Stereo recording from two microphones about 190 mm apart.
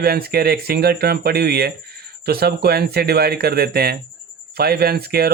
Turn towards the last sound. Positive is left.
turn(degrees=-55)  # may be behind; listen again after turning